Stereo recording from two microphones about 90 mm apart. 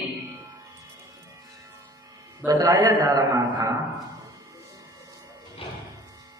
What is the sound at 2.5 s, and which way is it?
A man's voice, 45° right (ahead or behind).